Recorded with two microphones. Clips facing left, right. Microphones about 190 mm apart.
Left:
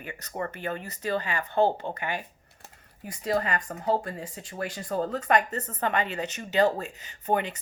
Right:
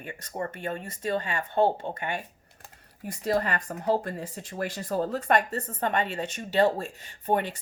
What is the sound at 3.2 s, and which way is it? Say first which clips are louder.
Speech: right 1 dB; 40° right (ahead or behind).